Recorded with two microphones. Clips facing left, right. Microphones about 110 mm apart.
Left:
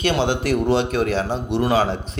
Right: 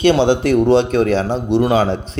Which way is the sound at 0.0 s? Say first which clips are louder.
Right 7 dB; 25° right (ahead or behind).